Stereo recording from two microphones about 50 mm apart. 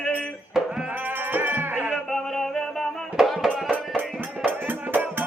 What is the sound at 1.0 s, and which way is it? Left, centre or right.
Music, right.